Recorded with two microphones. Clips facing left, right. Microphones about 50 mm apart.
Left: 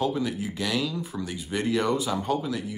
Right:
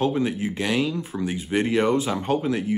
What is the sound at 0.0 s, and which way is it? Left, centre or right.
Speech, right.